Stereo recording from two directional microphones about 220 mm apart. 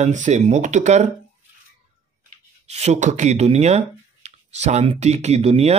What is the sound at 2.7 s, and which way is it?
Speech, 30° right (ahead or behind).